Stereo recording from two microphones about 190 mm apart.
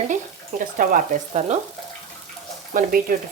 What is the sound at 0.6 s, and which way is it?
Speech, 50° right (ahead or behind).